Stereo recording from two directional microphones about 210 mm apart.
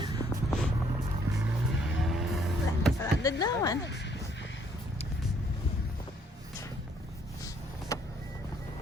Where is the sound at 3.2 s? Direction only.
15° left (ahead or behind).